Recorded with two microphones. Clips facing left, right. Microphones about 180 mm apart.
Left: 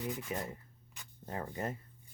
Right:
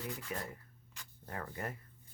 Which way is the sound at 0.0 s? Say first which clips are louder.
Left 4 dB; 20° left (ahead or behind).